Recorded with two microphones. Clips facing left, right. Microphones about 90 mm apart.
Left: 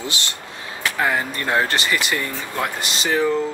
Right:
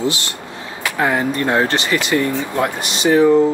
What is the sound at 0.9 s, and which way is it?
Speech, 15° right (ahead or behind).